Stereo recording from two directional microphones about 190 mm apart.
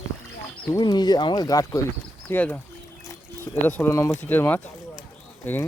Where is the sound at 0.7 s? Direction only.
20° left (ahead or behind).